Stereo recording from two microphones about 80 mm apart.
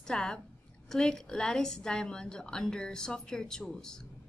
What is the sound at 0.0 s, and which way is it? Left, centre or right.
A woman's voice, centre.